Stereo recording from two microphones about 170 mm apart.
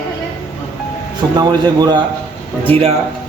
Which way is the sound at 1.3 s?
25° right (ahead or behind).